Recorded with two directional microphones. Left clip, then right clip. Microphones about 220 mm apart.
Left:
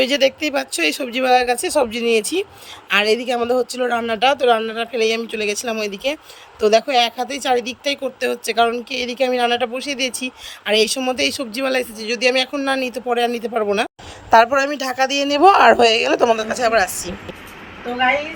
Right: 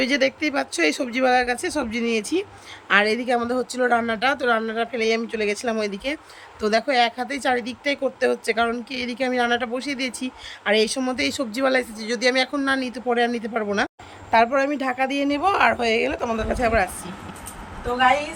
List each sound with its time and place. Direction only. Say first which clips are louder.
0.0 s speech: left 4 dB; 15° left (ahead or behind)